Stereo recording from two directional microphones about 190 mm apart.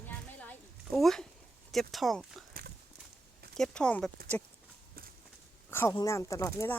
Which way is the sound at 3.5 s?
5° left (ahead or behind).